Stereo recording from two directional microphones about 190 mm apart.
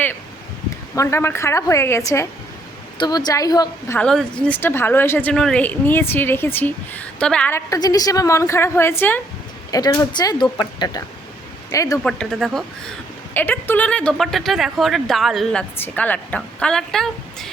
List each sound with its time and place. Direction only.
0.9 s a woman's voice: 15° left (ahead or behind)
3.9 s a woman's voice: 5° left (ahead or behind)
12.0 s speech: 5° left (ahead or behind)